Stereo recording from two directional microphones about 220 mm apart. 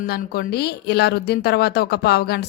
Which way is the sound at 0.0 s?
45° left (ahead or behind).